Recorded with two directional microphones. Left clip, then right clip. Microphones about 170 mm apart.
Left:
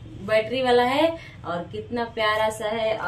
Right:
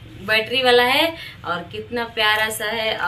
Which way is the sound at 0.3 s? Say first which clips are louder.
Right 4 dB; 25° left (ahead or behind).